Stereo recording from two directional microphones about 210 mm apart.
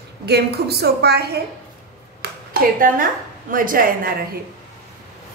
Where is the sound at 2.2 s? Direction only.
50° right (ahead or behind).